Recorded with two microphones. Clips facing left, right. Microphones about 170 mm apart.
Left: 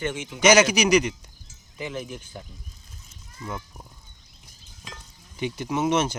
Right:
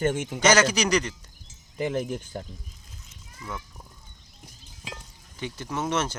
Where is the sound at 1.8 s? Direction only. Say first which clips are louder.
Right 6 dB; 45° right (ahead or behind).